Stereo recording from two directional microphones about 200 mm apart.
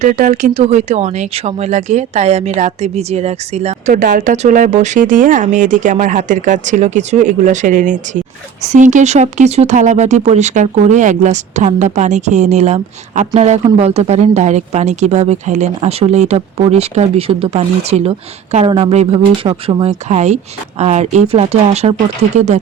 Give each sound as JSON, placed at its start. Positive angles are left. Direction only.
{"t": 0.0, "sound": "speech", "side_deg": -40}